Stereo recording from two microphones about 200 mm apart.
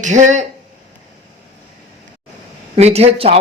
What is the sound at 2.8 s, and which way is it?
Speech, 30° right (ahead or behind).